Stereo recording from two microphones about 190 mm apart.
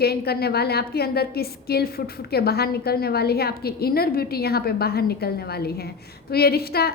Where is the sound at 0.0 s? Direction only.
55° left (ahead or behind).